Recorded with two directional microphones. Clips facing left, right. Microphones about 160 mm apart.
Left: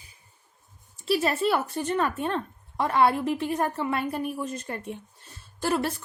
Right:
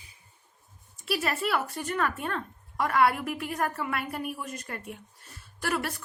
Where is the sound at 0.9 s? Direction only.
30° left (ahead or behind).